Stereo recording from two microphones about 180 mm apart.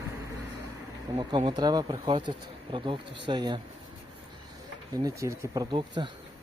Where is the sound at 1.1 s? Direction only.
25° right (ahead or behind).